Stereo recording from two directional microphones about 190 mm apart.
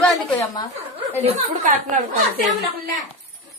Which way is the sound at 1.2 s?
40° right (ahead or behind).